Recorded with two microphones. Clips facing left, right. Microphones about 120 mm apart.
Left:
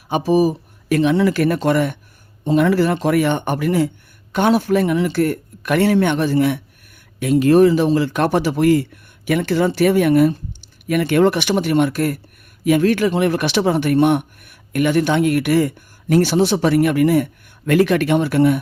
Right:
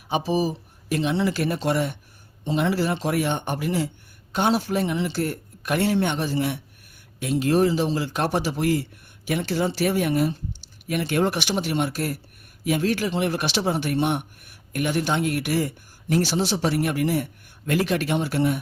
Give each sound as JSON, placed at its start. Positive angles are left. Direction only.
{"t": 0.1, "sound": "a man's voice", "side_deg": 50}